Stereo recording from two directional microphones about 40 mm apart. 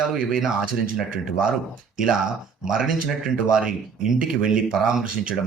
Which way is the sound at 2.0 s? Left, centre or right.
Centre.